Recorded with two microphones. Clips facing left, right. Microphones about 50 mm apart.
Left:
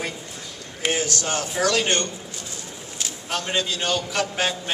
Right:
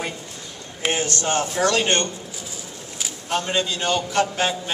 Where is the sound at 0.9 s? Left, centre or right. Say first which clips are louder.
Right 5 dB; right.